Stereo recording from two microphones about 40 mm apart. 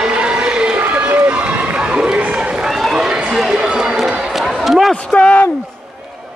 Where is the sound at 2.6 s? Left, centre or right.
Centre.